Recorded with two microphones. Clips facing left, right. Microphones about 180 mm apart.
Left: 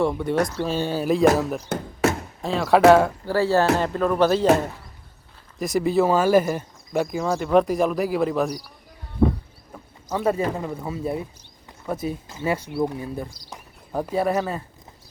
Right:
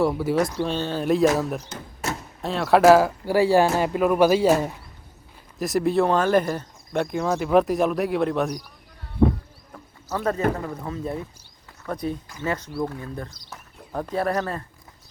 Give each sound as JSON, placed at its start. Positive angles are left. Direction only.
{"t": 0.0, "sound": "speech", "side_deg": -5}
{"t": 0.6, "sound": "speech", "side_deg": 5}
{"t": 3.2, "sound": "speech", "side_deg": -15}
{"t": 5.5, "sound": "speech", "side_deg": 0}
{"t": 9.7, "sound": "a sound", "side_deg": 10}
{"t": 10.6, "sound": "speech", "side_deg": 10}